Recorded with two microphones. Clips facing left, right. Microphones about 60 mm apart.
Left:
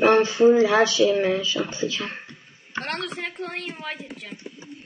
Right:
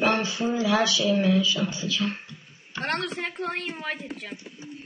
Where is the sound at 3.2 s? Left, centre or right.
Centre.